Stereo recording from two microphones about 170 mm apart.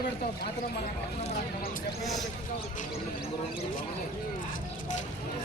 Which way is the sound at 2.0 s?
Centre (ahead or behind).